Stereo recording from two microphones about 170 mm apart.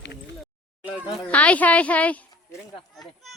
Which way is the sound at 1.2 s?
10° left (ahead or behind).